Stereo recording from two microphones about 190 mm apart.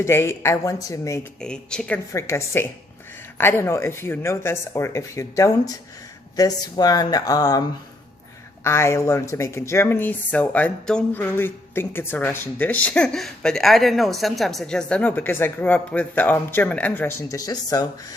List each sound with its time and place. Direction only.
0.0 s speech: 15° left (ahead or behind)
1.4 s speech: 5° left (ahead or behind); by 7.6 s 20° left (ahead or behind)
8.6 s speech: 15° left (ahead or behind)